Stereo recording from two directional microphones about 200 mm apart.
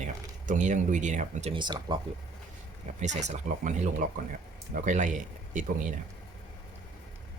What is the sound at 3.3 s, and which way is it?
Speech, 35° right (ahead or behind).